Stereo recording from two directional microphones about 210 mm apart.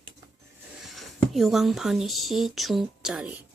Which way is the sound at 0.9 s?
Centre (ahead or behind).